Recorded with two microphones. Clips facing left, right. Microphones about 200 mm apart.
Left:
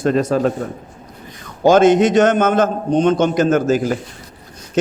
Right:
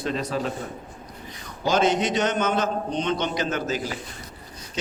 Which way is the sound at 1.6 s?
50° left (ahead or behind).